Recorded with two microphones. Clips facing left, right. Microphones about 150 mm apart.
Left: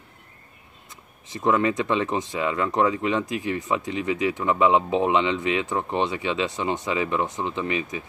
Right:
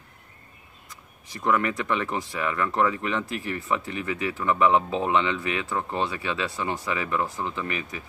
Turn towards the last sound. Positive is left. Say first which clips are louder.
# left 4 dB
turn(degrees=20)  # may be behind; listen again after turning